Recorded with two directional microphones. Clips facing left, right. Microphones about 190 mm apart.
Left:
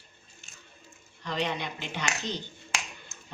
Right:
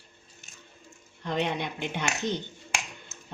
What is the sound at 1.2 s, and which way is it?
Speech, 55° right (ahead or behind).